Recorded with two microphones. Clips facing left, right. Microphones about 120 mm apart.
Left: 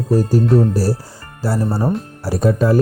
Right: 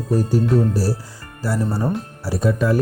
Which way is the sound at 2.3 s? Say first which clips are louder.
Left 4 dB; 45° left (ahead or behind).